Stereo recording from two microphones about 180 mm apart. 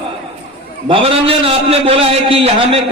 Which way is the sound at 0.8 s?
30° right (ahead or behind).